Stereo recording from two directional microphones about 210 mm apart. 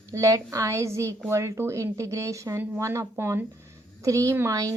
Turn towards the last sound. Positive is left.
turn(degrees=-15)  # may be behind; listen again after turning